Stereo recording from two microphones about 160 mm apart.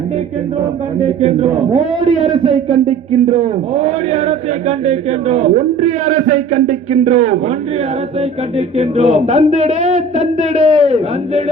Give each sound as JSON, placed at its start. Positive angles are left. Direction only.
{"t": 1.2, "sound": "a man's voice", "side_deg": -45}
{"t": 8.5, "sound": "a man's voice", "side_deg": -40}